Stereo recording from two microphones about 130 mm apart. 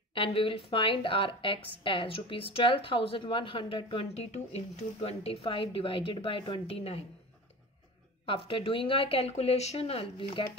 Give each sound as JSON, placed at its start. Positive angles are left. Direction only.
{"t": 0.1, "sound": "speech", "side_deg": 45}
{"t": 8.3, "sound": "speech", "side_deg": 40}